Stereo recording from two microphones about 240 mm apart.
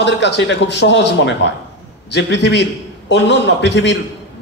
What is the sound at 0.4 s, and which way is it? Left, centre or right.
A man's voice, left.